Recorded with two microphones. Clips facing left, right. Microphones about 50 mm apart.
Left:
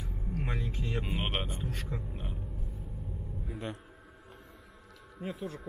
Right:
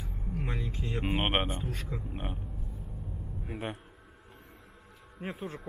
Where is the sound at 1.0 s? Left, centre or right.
Right.